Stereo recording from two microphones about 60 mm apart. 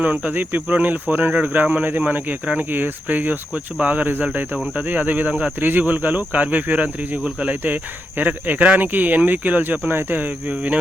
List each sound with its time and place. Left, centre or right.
0.0 s speech: right